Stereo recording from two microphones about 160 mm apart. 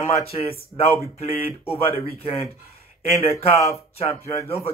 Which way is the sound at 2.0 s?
35° left (ahead or behind).